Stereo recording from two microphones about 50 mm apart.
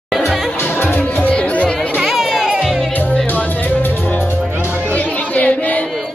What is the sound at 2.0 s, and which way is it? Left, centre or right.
Music, centre.